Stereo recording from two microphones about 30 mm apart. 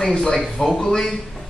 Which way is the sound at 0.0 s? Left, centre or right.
Left.